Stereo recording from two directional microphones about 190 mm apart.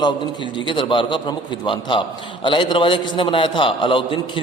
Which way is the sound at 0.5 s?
25° left (ahead or behind).